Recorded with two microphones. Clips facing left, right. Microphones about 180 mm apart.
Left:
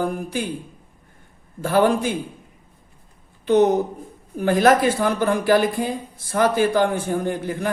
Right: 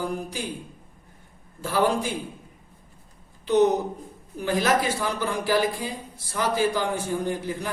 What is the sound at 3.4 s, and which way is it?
A woman's voice, 55° left (ahead or behind).